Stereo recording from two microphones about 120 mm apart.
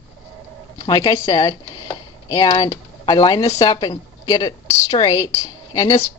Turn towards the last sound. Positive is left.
turn(degrees=25)  # may be behind; listen again after turning